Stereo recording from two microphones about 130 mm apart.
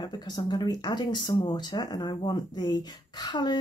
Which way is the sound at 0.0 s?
35° left (ahead or behind).